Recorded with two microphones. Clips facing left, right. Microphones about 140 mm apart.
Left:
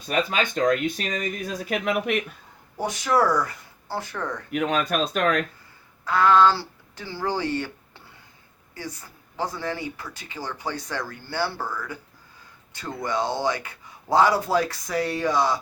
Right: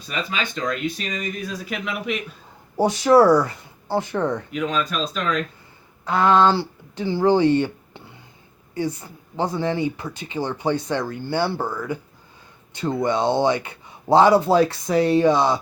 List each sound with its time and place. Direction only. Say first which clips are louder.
0.1 s speech: left 3 dB; 50° left (ahead or behind)
2.7 s speech: right 8 dB; 30° right (ahead or behind)
4.5 s speech: left 1 dB; 60° left (ahead or behind)
6.1 s speech: right 1 dB; 20° right (ahead or behind)
13.0 s speech: right 6 dB; 25° right (ahead or behind)